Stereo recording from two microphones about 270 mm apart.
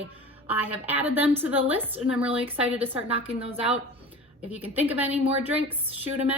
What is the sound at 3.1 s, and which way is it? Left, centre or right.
Speech, right.